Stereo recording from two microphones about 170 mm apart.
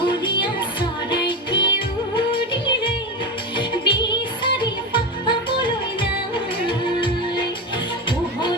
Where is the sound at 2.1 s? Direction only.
30° left (ahead or behind).